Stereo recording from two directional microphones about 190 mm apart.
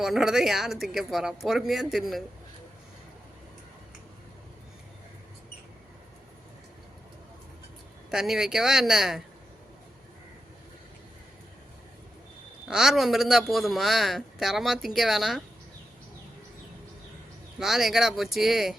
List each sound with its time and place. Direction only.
0.0 s a man's voice: centre (ahead or behind)
8.1 s a man's voice: centre (ahead or behind)
12.6 s a man's voice: centre (ahead or behind)
17.6 s a man's voice: centre (ahead or behind)